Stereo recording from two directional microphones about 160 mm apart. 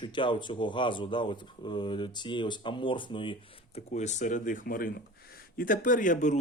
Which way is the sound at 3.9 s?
45° left (ahead or behind).